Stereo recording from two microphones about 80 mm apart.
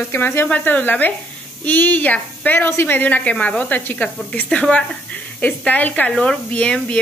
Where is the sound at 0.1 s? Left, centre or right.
Left.